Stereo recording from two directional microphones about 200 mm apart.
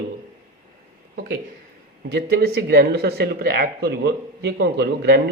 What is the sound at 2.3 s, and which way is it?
Speech, 55° right (ahead or behind).